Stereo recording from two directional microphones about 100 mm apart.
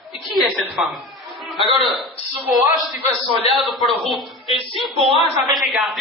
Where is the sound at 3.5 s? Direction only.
Centre (ahead or behind).